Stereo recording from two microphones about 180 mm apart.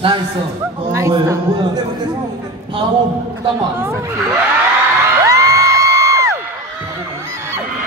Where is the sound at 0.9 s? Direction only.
15° right (ahead or behind).